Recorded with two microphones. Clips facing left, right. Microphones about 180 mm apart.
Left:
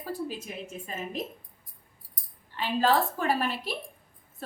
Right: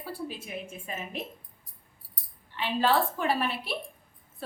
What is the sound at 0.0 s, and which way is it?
A woman's voice, 40° left (ahead or behind).